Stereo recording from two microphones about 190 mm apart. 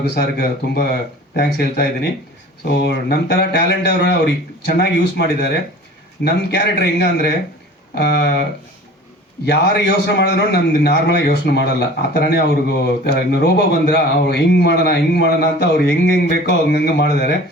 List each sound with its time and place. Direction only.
0.0 s a man's voice: 55° left (ahead or behind)
9.5 s a man's voice: 65° left (ahead or behind)